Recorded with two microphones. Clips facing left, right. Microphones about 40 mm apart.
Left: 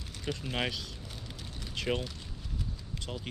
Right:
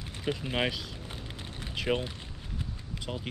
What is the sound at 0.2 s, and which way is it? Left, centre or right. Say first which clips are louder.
Speech: right 4 dB; centre.